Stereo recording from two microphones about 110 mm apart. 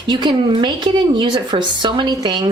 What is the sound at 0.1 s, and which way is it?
A woman's voice, 45° right (ahead or behind).